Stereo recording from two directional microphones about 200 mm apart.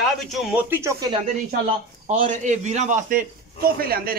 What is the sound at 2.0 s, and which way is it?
A man's voice, 35° right (ahead or behind).